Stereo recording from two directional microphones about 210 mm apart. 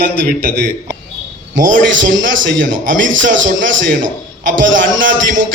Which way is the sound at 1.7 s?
60° right (ahead or behind).